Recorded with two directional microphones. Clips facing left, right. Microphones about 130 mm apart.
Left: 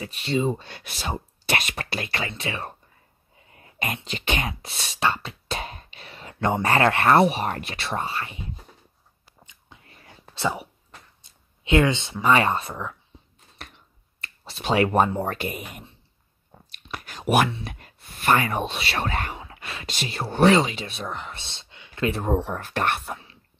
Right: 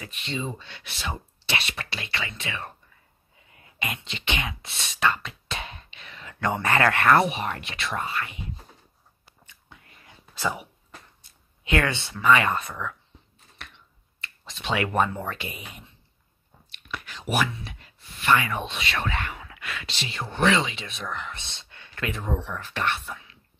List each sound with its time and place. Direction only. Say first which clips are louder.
0.0 s speech: left 8 dB; 35° left (ahead or behind)
10.3 s speech: left 2 dB; 30° left (ahead or behind)
11.6 s speech: left 5 dB; 20° left (ahead or behind)
12.2 s speech: even; 35° left (ahead or behind)
13.6 s finger snapping: left 2 dB; 35° left (ahead or behind)
14.2 s speech: left 4 dB; 40° left (ahead or behind)
16.7 s whispering: left 1 dB; 40° left (ahead or behind)
17.6 s speech: left 5 dB; 50° left (ahead or behind); by 21.7 s 30° left (ahead or behind)
21.7 s a sound: left 1 dB; 15° left (ahead or behind)
22.0 s speech: left 6 dB; 40° left (ahead or behind)
23.1 s whispering: left 4 dB; 30° left (ahead or behind)